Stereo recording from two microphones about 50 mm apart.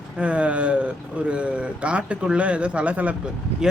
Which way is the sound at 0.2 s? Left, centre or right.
Right.